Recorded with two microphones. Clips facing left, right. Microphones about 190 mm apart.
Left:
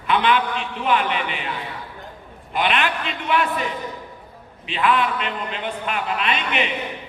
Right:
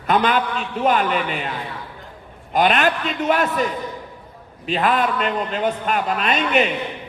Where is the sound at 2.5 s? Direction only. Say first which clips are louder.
Right 5 dB; 40° right (ahead or behind).